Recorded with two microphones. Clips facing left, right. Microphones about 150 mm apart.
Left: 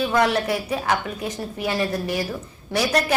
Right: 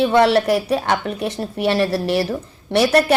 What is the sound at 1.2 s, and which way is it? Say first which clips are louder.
Speech: right 5 dB; 75° right (ahead or behind).